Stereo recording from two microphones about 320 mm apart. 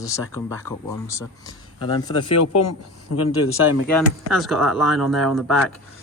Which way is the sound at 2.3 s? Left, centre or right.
Left.